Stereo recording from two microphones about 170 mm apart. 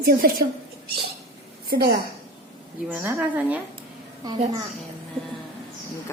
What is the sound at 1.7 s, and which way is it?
Speech, 60° right (ahead or behind).